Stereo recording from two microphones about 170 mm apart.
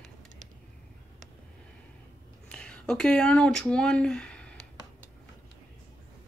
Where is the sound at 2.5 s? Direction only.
5° left (ahead or behind).